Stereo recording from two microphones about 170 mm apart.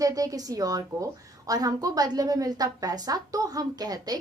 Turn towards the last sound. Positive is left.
turn(degrees=-20)  # may be behind; listen again after turning